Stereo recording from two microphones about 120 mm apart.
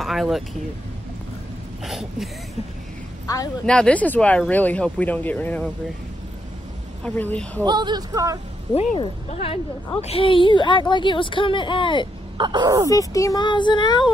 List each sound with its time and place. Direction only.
0.0 s speech: centre (ahead or behind)
1.9 s speech: 5° right (ahead or behind)
3.3 s speech: 30° left (ahead or behind)
3.6 s speech: 10° left (ahead or behind)
7.0 s speech: 10° left (ahead or behind)
7.6 s speech: 35° right (ahead or behind)
8.7 s a woman's voice: 55° left (ahead or behind)
12.4 s speech: 40° right (ahead or behind)
12.9 s speech: 30° left (ahead or behind)